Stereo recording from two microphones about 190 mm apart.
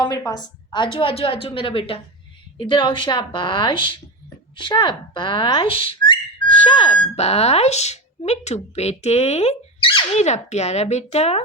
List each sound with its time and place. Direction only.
0.0 s a woman's voice: 20° left (ahead or behind)
4.5 s whistling: 25° left (ahead or behind)